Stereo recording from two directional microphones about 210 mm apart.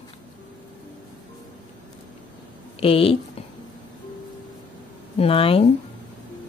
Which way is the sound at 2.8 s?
25° left (ahead or behind).